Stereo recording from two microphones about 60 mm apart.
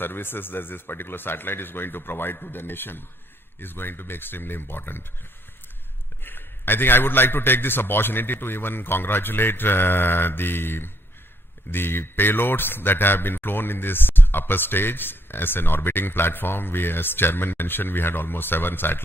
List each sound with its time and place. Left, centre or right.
0.0 s speech: left
6.2 s speech: left